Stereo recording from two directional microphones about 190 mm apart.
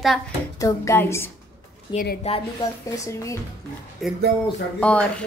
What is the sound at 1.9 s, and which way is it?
Speech, 25° left (ahead or behind).